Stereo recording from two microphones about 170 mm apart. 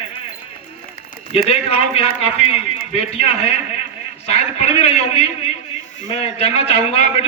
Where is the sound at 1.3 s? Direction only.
35° left (ahead or behind).